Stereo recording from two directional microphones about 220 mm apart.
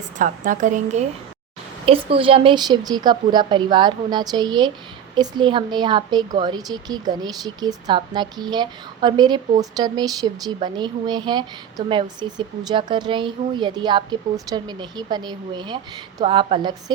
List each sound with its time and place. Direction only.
0.2 s a woman's voice: 35° right (ahead or behind)